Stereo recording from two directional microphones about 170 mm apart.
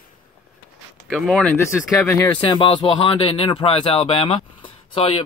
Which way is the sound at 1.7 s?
15° left (ahead or behind).